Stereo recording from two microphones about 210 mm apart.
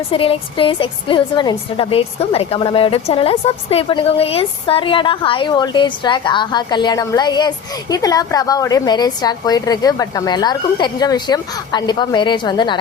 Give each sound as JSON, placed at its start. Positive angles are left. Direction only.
{"t": 0.1, "sound": "a woman's voice", "side_deg": 25}